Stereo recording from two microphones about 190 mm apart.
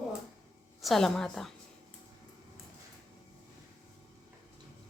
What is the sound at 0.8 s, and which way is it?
Speech, centre (ahead or behind).